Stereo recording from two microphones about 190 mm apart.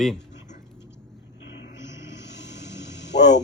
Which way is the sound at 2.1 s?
65° left (ahead or behind).